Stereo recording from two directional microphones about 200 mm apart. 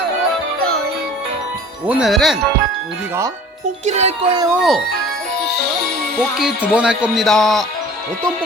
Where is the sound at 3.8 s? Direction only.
35° right (ahead or behind).